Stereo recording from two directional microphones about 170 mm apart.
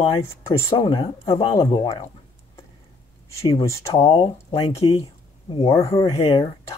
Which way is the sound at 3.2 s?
20° left (ahead or behind).